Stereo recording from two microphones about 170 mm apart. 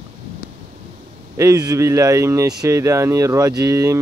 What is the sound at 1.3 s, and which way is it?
Speech, 20° right (ahead or behind).